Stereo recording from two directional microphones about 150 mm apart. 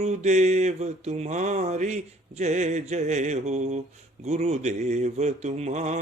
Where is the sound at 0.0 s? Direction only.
50° right (ahead or behind).